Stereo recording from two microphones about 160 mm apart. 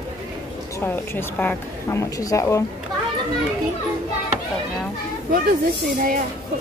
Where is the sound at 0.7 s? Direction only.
15° left (ahead or behind).